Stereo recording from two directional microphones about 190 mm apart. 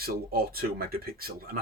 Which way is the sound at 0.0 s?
55° right (ahead or behind).